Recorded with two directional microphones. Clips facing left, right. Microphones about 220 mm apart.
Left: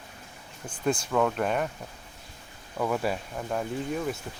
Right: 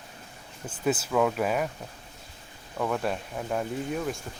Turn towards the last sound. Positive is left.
turn(degrees=0)  # may be behind; listen again after turning